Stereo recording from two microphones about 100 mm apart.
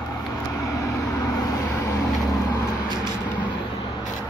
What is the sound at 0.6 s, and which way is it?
Vehicle, 35° left (ahead or behind).